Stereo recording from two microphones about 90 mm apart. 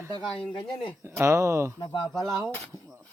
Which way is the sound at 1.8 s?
50° left (ahead or behind).